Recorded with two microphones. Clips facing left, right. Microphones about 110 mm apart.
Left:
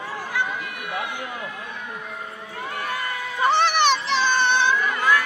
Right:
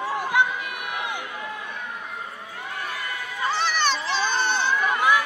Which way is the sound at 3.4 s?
65° left (ahead or behind).